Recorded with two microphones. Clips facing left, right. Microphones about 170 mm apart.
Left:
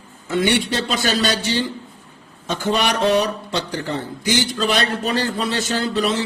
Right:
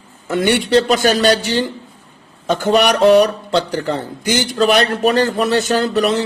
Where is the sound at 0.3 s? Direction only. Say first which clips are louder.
Right 4 dB; 50° right (ahead or behind).